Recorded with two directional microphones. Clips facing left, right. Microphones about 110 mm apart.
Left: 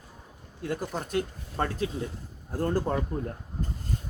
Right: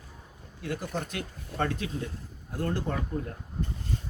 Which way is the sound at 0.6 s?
40° left (ahead or behind).